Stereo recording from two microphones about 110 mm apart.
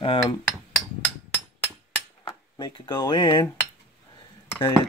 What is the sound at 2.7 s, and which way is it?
Speech, 45° left (ahead or behind).